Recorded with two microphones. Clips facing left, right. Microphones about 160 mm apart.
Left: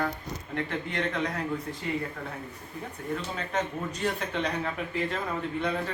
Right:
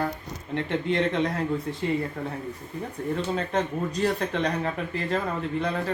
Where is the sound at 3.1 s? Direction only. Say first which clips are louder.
Right 4 dB; 35° right (ahead or behind).